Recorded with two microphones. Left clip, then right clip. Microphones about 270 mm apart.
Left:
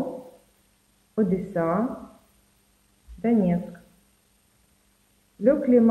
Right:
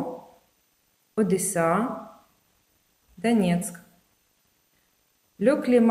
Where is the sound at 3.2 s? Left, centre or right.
Right.